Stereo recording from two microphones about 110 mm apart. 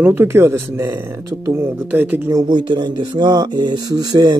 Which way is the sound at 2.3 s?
45° right (ahead or behind).